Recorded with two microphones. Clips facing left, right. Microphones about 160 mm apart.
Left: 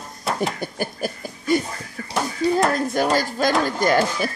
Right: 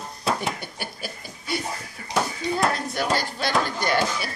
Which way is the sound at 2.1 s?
30° left (ahead or behind).